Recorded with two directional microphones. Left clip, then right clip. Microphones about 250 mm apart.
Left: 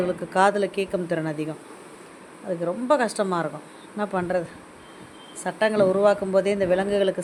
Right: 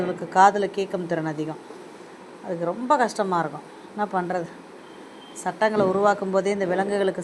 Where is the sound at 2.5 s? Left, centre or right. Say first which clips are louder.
Even; centre.